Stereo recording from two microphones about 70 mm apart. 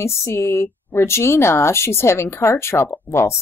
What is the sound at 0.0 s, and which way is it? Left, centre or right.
Speech, left.